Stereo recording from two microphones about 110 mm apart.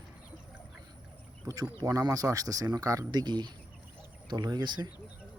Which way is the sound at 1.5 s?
35° right (ahead or behind).